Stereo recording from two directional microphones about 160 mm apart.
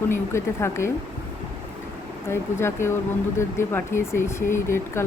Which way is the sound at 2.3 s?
15° left (ahead or behind).